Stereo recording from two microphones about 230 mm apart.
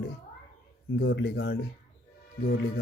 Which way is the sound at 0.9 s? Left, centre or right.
Left.